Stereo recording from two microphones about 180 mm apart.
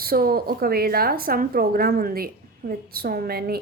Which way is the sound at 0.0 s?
55° right (ahead or behind).